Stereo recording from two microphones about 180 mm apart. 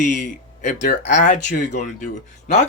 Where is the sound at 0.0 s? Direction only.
45° left (ahead or behind).